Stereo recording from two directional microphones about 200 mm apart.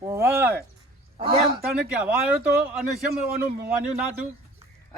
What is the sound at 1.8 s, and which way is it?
Speech, 5° right (ahead or behind).